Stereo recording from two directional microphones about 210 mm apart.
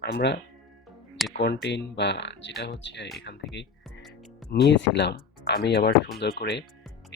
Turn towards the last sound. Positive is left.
turn(degrees=50)  # may be behind; listen again after turning